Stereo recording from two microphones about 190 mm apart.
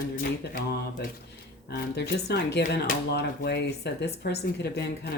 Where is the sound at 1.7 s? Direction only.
60° left (ahead or behind).